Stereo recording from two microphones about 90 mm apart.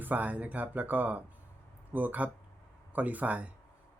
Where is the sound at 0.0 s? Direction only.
20° right (ahead or behind).